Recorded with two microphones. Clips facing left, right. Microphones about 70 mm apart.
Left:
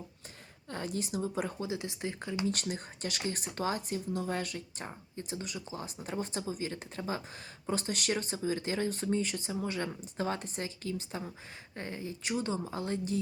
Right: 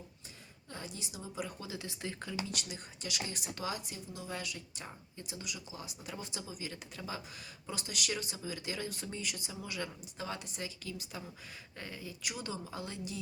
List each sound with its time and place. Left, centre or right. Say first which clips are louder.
0.7 s a woman's voice: left 10 dB; left
1.5 s speech: left 7 dB; left
2.5 s speech: left 8 dB; left